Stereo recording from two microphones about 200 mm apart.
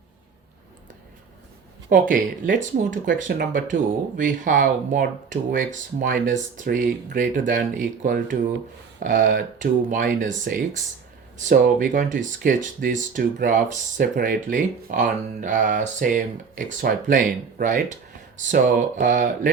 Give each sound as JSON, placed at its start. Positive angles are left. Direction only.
{"t": 1.9, "sound": "speech", "side_deg": -45}
{"t": 11.3, "sound": "speech", "side_deg": -40}